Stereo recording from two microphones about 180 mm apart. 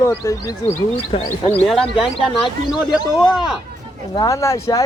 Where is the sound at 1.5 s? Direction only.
5° left (ahead or behind).